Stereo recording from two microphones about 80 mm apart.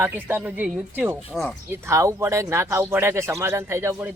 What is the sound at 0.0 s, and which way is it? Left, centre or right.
A man's voice, right.